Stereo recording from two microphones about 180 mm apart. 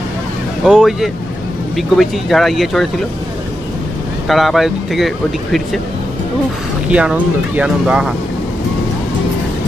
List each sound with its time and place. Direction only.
0.7 s speech: 5° right (ahead or behind)
4.3 s speech: centre (ahead or behind)
6.9 s speech: 5° right (ahead or behind)